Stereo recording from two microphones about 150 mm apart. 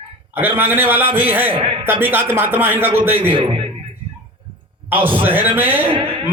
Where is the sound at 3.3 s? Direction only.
35° right (ahead or behind).